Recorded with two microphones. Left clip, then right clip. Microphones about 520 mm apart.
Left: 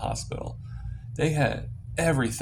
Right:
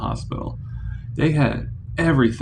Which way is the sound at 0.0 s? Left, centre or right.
Left.